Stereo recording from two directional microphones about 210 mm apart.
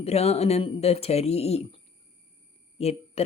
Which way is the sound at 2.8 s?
30° left (ahead or behind).